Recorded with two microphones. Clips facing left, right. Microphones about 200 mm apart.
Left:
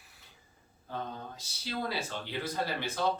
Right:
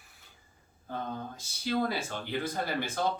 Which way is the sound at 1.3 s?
50° right (ahead or behind).